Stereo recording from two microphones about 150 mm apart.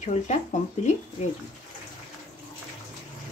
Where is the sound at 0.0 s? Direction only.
55° left (ahead or behind).